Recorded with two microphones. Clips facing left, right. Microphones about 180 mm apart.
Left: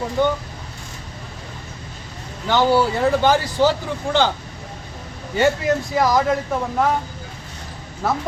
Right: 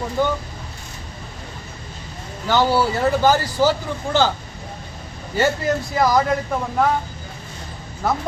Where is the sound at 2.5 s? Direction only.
5° right (ahead or behind).